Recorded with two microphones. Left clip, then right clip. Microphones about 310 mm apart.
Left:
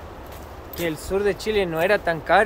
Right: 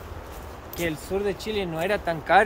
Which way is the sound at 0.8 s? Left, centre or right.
Centre.